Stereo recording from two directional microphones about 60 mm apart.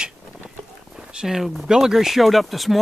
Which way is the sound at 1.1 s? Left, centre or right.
Centre.